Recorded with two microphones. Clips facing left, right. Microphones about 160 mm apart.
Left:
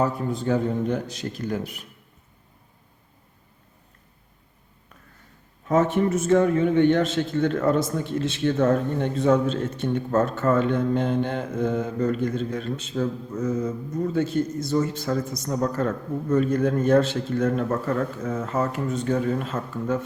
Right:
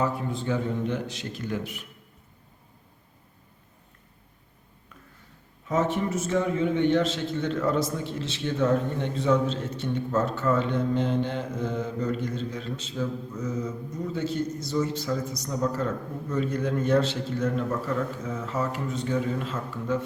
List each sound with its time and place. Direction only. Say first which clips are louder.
0.0 s a man's voice: left 4 dB; 40° left (ahead or behind)
5.6 s a man's voice: left 5 dB; 55° left (ahead or behind)